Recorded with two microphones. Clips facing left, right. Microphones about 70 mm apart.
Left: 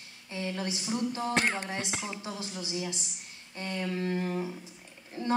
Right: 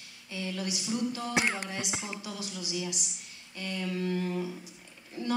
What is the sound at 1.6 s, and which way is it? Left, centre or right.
A woman's voice, left.